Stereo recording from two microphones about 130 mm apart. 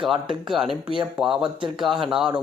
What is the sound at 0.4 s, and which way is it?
A man's voice, 5° right (ahead or behind).